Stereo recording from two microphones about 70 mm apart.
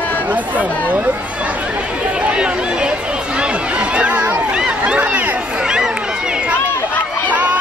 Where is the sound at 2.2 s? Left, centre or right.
Centre.